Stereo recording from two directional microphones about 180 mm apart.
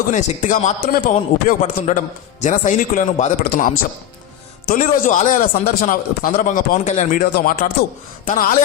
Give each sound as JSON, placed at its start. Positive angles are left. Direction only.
{"t": 0.1, "sound": "speech", "side_deg": 45}
{"t": 1.1, "sound": "speech", "side_deg": 40}
{"t": 3.4, "sound": "a man's voice", "side_deg": 60}
{"t": 4.7, "sound": "speech", "side_deg": 45}
{"t": 7.3, "sound": "a man's voice", "side_deg": 60}